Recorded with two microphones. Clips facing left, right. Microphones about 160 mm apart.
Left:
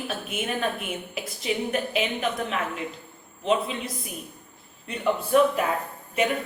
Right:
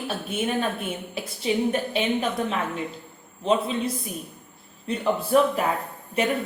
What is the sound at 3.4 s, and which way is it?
A woman's voice, 30° right (ahead or behind).